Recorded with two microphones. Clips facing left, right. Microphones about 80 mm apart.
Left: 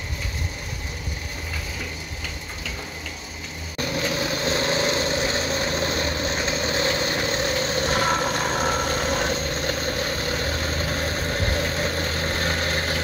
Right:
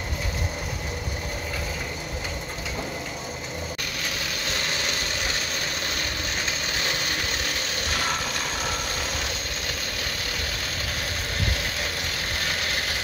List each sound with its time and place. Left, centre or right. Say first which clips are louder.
3.9 s vehicle: left 7 dB; left